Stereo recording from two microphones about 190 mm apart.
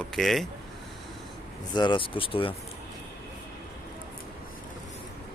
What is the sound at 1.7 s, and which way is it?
Speech, 25° left (ahead or behind).